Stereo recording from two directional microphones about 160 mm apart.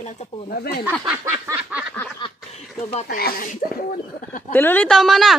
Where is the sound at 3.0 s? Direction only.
70° left (ahead or behind).